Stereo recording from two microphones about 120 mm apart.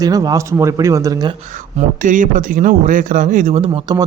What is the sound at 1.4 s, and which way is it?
Speech, 90° right.